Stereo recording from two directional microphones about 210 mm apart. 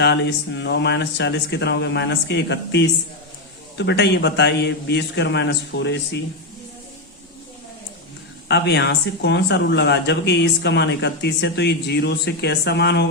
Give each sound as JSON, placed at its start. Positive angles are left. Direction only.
{"t": 0.0, "sound": "speech", "side_deg": 55}
{"t": 8.4, "sound": "speech", "side_deg": 55}